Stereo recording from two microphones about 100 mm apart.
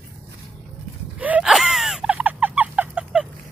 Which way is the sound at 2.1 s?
15° right (ahead or behind).